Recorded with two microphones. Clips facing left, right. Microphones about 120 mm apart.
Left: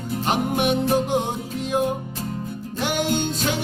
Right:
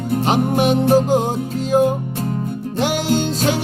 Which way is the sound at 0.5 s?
40° right (ahead or behind).